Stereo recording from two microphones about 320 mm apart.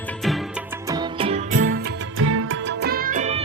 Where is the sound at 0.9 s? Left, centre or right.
Centre.